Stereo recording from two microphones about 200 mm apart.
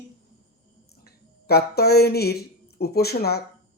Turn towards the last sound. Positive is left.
turn(degrees=50)  # may be behind; listen again after turning